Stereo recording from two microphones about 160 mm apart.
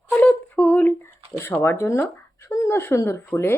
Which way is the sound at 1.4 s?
15° left (ahead or behind).